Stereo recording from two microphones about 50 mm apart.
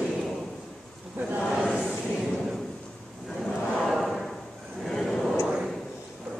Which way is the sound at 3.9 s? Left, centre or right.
Centre.